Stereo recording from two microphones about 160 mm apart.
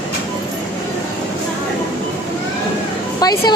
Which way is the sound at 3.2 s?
25° left (ahead or behind).